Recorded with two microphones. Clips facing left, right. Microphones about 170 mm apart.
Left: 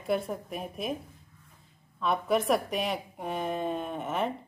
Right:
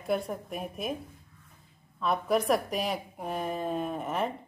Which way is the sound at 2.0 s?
Centre (ahead or behind).